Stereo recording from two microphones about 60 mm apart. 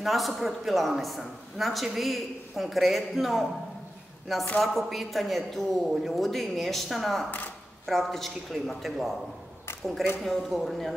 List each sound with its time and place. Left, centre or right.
0.0 s a man's voice: centre
4.6 s a man's voice: centre
7.2 s speech: left
7.8 s a man's voice: centre
10.2 s a man's voice: centre